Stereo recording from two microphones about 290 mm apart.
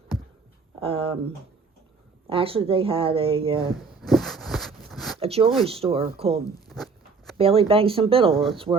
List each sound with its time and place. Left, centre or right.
0.8 s a woman's voice: centre
2.3 s a woman's voice: centre
4.0 s a sound: centre
5.2 s a woman's voice: right
6.7 s zipper: centre
7.3 s a woman's voice: centre